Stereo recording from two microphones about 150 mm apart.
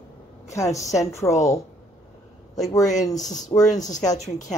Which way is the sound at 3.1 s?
55° left (ahead or behind).